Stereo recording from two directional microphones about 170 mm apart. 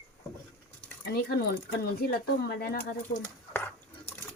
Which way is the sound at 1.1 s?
65° left (ahead or behind).